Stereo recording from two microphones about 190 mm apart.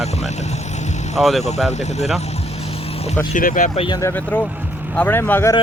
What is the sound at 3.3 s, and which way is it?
Speech, 45° left (ahead or behind).